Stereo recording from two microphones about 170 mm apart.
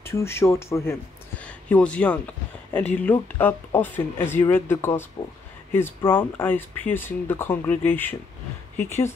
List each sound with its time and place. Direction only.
0.0 s speech: 15° left (ahead or behind)